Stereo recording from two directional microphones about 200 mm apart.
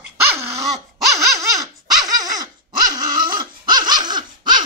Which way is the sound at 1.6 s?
20° right (ahead or behind).